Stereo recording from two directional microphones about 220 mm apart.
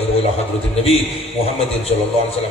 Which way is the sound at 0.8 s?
25° left (ahead or behind).